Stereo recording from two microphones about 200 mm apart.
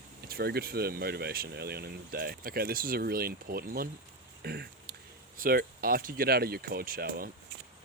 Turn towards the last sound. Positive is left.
turn(degrees=-45)  # may be behind; listen again after turning